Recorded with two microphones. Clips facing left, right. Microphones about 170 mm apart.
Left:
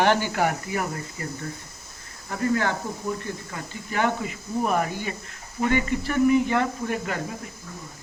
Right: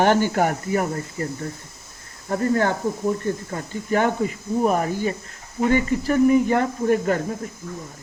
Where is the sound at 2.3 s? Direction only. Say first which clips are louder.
Right 4 dB; 40° right (ahead or behind).